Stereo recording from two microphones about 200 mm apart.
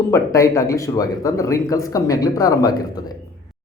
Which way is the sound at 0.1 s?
15° left (ahead or behind).